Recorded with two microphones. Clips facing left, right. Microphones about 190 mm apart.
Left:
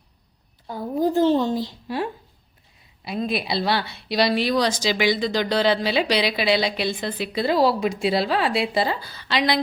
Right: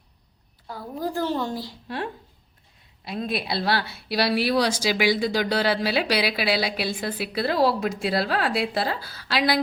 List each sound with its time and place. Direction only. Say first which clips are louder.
0.7 s a woman's voice: left 8 dB; 20° left (ahead or behind)
3.0 s speech: left 3 dB; centre (ahead or behind)